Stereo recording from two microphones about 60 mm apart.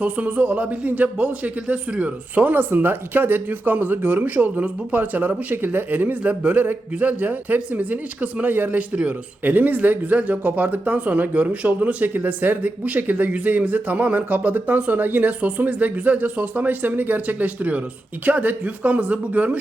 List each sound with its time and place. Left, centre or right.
0.0 s speech: right